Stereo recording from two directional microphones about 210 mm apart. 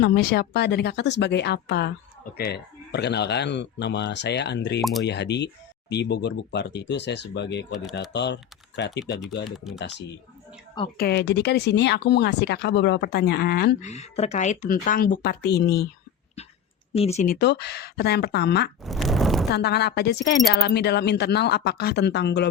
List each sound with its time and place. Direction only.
0.0 s speech: 50° left (ahead or behind)
4.8 s speech: centre (ahead or behind)
5.0 s speech: 55° left (ahead or behind)
7.7 s speech: centre (ahead or behind)
8.1 s speech: 55° left (ahead or behind)
9.7 s speech: centre (ahead or behind)
10.9 s speech: 50° left (ahead or behind)
13.8 s speech: 30° left (ahead or behind); by 15.9 s 50° left (ahead or behind)
16.9 s speech: 30° left (ahead or behind)
17.3 s speech: 55° left (ahead or behind)
18.9 s a sound: centre (ahead or behind)
19.5 s speech: 50° left (ahead or behind)